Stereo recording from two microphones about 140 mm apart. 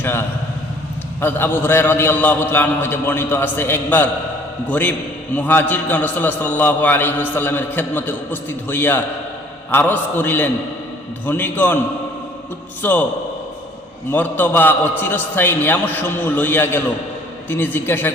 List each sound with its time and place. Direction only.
0.0 s a man's voice: 15° left (ahead or behind)
12.8 s a man's voice: 15° left (ahead or behind)
14.1 s a man's voice: 15° left (ahead or behind)